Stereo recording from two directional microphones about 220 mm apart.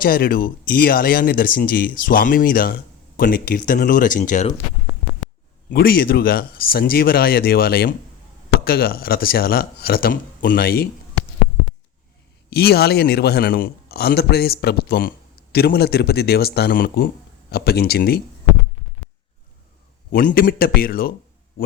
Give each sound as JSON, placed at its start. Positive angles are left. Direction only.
{"t": 0.0, "sound": "speech", "side_deg": 40}
{"t": 5.7, "sound": "a man's voice", "side_deg": 45}
{"t": 12.5, "sound": "a man's voice", "side_deg": 45}
{"t": 20.1, "sound": "speech", "side_deg": 40}